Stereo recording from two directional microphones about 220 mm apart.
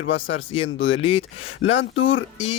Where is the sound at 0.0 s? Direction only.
55° left (ahead or behind).